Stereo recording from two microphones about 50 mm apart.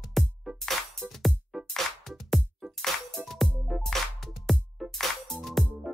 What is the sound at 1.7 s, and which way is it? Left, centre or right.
Music, centre.